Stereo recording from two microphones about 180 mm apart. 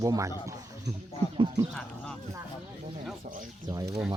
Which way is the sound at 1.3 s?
25° right (ahead or behind).